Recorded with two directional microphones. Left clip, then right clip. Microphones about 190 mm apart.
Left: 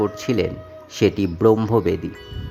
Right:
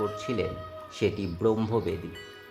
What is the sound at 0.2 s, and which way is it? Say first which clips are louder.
Speech: left 8 dB; 30° left (ahead or behind).